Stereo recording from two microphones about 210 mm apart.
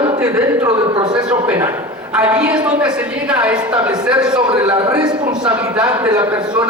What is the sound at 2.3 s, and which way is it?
A man's voice, 5° right (ahead or behind).